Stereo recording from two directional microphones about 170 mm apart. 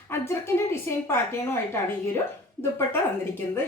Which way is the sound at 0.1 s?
15° left (ahead or behind).